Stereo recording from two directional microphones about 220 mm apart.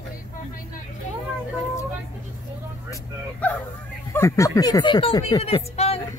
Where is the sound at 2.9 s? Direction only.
10° left (ahead or behind).